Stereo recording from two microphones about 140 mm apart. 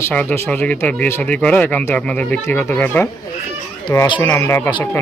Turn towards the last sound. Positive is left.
turn(degrees=15)  # may be behind; listen again after turning